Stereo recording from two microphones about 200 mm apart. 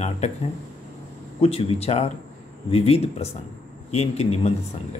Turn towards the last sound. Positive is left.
turn(degrees=30)  # may be behind; listen again after turning